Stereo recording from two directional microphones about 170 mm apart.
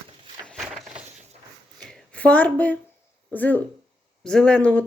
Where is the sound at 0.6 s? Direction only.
Centre (ahead or behind).